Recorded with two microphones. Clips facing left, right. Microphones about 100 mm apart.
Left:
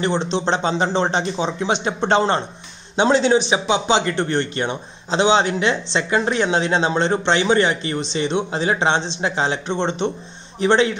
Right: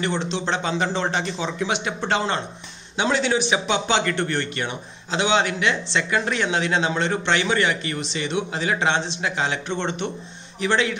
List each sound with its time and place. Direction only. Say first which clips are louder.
0.0 s speech: left 5 dB; 30° left (ahead or behind)